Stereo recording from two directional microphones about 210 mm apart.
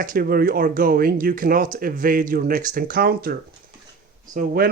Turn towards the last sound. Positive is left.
turn(degrees=-45)  # may be behind; listen again after turning